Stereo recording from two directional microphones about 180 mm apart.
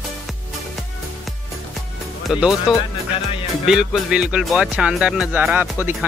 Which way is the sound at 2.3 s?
5° right (ahead or behind).